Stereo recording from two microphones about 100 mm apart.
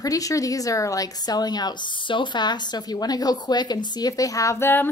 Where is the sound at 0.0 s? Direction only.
35° left (ahead or behind).